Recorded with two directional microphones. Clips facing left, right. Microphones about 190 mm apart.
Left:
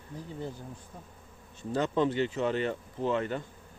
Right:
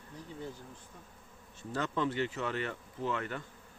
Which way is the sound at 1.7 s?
20° left (ahead or behind).